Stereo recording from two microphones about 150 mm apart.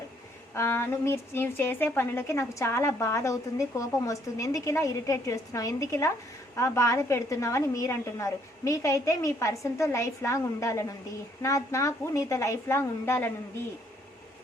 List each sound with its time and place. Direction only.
0.5 s a woman's voice: 15° left (ahead or behind)